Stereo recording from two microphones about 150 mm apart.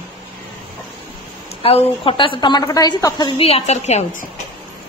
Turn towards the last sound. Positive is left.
turn(degrees=50)  # may be behind; listen again after turning